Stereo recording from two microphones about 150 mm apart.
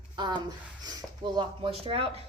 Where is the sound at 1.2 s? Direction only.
30° right (ahead or behind).